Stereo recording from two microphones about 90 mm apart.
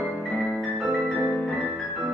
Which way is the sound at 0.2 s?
5° left (ahead or behind).